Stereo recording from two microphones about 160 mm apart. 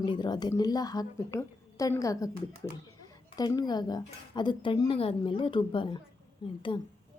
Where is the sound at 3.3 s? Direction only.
25° left (ahead or behind).